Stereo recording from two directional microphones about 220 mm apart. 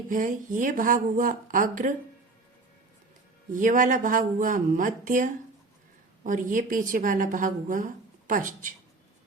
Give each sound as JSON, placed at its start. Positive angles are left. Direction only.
{"t": 0.1, "sound": "speech", "side_deg": -35}
{"t": 3.5, "sound": "speech", "side_deg": -35}